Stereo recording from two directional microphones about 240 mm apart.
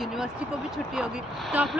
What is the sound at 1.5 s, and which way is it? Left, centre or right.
Speech, centre.